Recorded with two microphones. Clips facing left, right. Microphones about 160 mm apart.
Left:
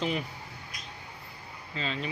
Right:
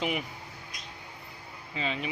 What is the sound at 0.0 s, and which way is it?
Speech, 15° right (ahead or behind).